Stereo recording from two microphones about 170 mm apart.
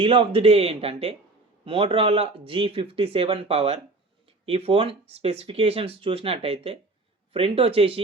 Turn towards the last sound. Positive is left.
turn(degrees=-35)  # may be behind; listen again after turning